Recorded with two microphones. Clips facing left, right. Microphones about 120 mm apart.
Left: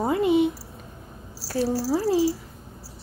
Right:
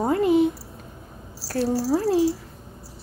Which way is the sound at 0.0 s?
Centre (ahead or behind).